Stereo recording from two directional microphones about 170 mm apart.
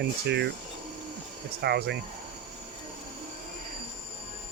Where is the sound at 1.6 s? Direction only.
80° right.